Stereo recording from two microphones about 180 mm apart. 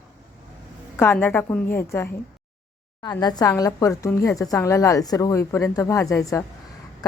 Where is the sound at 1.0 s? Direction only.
10° left (ahead or behind).